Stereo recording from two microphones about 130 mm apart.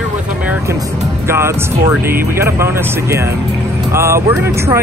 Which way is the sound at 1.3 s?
20° right (ahead or behind).